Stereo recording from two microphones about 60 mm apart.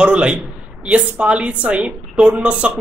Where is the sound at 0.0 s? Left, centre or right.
Centre.